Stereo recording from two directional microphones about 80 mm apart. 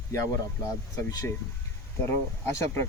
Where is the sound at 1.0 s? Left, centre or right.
Left.